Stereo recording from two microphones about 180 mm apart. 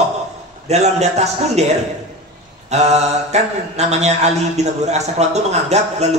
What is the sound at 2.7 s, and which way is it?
A man's voice, 40° right (ahead or behind).